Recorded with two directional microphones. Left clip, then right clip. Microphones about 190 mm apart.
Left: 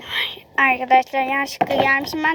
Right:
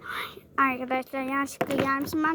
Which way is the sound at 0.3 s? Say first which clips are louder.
Left 7 dB; 25° right (ahead or behind).